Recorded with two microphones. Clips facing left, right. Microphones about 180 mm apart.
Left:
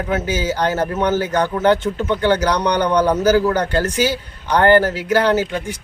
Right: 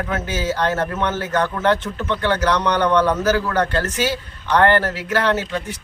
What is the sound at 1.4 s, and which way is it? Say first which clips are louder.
A man's voice: left 3 dB; 30° left (ahead or behind).